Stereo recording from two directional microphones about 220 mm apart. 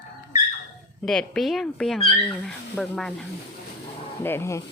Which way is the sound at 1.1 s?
Centre (ahead or behind).